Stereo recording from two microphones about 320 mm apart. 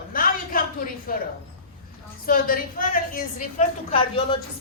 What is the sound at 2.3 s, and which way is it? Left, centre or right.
A woman's voice, left.